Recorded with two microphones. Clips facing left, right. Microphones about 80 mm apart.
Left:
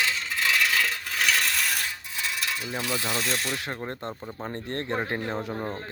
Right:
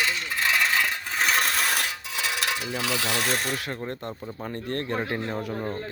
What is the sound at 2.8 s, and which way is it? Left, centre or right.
Rub, right.